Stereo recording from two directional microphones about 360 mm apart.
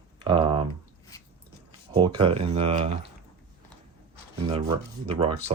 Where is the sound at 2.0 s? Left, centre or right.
Centre.